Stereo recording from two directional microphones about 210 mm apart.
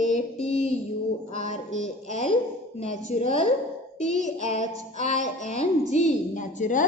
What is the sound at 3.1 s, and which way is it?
Speech, 35° left (ahead or behind).